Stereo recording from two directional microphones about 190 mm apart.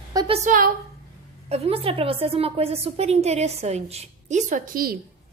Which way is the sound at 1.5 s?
30° right (ahead or behind).